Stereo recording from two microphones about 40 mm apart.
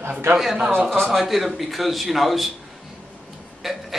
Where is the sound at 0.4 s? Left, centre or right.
Centre.